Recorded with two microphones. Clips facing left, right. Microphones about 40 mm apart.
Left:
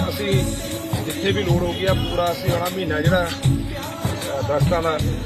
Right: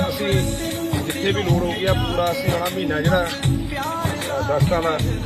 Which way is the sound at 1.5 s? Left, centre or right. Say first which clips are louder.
Even; right.